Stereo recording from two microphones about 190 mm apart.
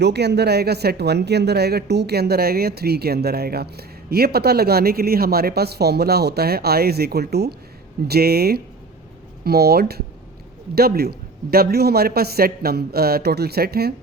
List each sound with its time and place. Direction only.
0.0 s speech: 60° right (ahead or behind)